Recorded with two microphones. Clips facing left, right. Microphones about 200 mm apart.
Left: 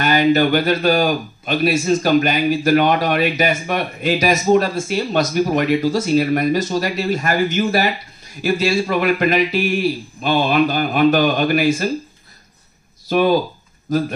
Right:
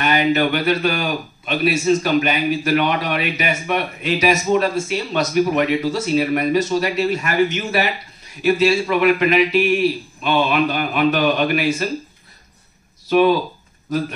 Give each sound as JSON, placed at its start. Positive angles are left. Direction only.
{"t": 0.0, "sound": "a man's voice", "side_deg": 35}
{"t": 13.1, "sound": "a man's voice", "side_deg": 40}